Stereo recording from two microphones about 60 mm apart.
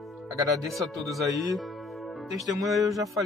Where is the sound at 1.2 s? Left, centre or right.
Right.